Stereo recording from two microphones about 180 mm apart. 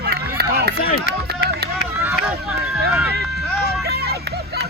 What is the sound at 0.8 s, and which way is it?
Speech, 55° left (ahead or behind).